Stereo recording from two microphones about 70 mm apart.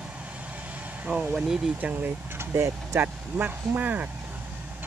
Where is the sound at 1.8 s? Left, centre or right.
Right.